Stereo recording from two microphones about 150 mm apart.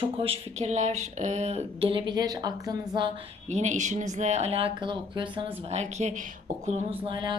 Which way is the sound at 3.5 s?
50° right (ahead or behind).